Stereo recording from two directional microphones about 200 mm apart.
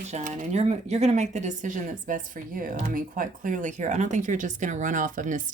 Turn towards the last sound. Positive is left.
turn(degrees=-40)  # may be behind; listen again after turning